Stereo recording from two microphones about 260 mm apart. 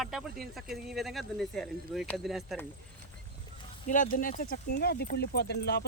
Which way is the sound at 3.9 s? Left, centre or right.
Left.